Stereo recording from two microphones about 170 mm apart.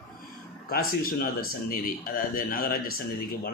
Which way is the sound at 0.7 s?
60° left (ahead or behind).